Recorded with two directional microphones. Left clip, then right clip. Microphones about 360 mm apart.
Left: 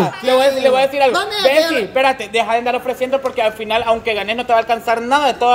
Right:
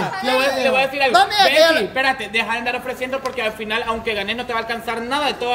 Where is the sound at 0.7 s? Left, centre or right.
Centre.